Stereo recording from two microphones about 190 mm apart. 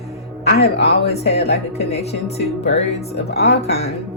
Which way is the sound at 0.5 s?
60° left (ahead or behind).